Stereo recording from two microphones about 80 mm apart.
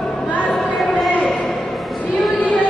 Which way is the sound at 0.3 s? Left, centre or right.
Centre.